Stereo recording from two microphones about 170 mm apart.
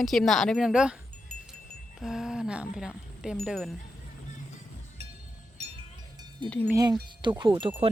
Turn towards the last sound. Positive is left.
turn(degrees=-30)  # may be behind; listen again after turning